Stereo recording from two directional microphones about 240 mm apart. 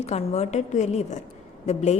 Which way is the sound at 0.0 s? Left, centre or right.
Left.